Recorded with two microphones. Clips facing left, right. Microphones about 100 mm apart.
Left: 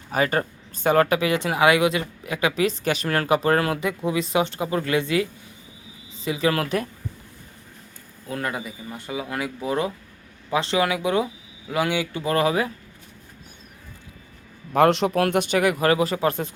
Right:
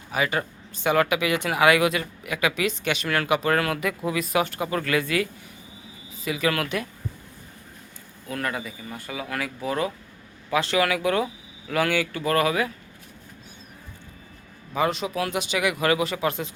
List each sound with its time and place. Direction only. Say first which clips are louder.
0.1 s speech: left 3 dB; 40° left (ahead or behind)
8.3 s speech: left 1 dB; 20° left (ahead or behind)
14.7 s speech: left 7 dB; 75° left (ahead or behind); by 16.6 s 45° left (ahead or behind)